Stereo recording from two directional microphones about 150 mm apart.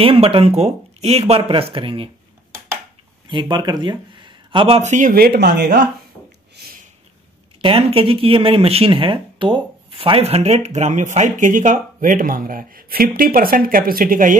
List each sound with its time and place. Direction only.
0.0 s speech: 40° right (ahead or behind)
3.3 s speech: 30° right (ahead or behind)
4.9 s speech: 75° right (ahead or behind)
6.6 s a sound: 90° right
7.6 s speech: 35° right (ahead or behind); by 14.4 s 65° right (ahead or behind)